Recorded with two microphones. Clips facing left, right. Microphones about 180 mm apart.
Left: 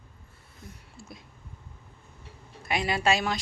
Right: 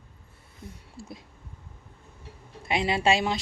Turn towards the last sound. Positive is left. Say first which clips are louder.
# right 2 dB
turn(degrees=-25)  # may be behind; listen again after turning